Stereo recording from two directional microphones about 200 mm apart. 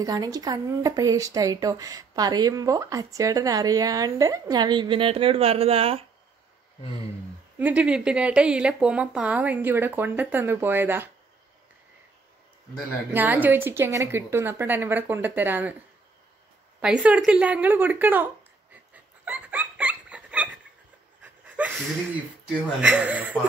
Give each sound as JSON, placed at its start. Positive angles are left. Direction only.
{"t": 0.0, "sound": "speech", "side_deg": -20}
{"t": 7.5, "sound": "speech", "side_deg": -5}
{"t": 13.1, "sound": "speech", "side_deg": -10}
{"t": 16.8, "sound": "speech", "side_deg": -5}
{"t": 19.2, "sound": "a sound", "side_deg": -10}
{"t": 22.8, "sound": "speech", "side_deg": -5}